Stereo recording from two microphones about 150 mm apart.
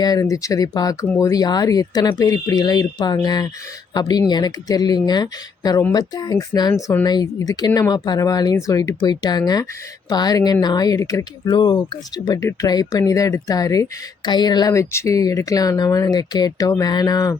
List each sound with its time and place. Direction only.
0.0 s speech: 25° left (ahead or behind)